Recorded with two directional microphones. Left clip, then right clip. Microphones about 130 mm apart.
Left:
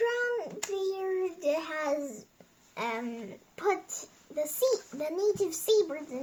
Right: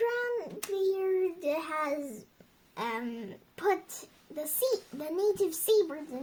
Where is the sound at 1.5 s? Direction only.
30° right (ahead or behind).